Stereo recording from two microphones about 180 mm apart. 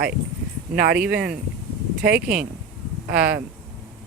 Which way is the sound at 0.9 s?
5° right (ahead or behind).